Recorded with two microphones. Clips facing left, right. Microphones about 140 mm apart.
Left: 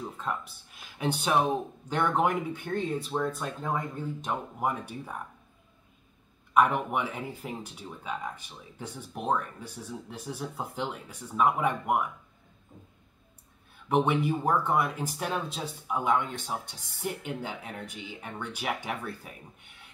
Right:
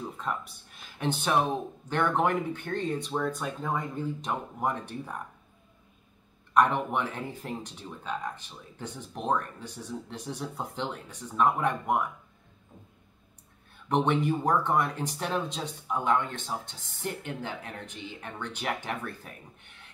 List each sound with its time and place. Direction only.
0.0 s speech: centre (ahead or behind)
6.5 s speech: 5° left (ahead or behind)
13.8 s speech: 5° left (ahead or behind)